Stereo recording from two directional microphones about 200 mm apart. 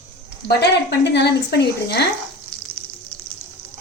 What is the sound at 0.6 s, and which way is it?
A woman's voice, 55° left (ahead or behind).